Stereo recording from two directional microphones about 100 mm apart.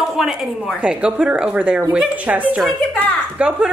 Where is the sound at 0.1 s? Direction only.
5° right (ahead or behind).